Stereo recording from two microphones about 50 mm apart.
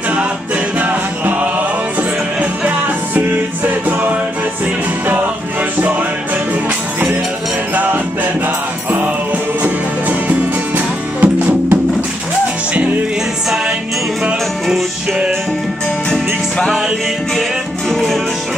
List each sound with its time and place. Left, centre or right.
0.7 s music: right
3.2 s music: right
7.7 s music: right
9.6 s music: right
14.2 s music: centre
16.1 s music: centre
17.4 s music: centre